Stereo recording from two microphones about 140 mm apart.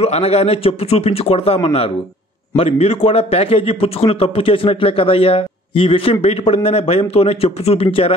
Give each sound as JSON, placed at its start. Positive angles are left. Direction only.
{"t": 0.0, "sound": "a man's voice", "side_deg": 45}